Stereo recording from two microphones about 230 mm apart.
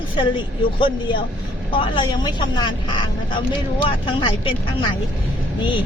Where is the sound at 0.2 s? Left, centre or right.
Left.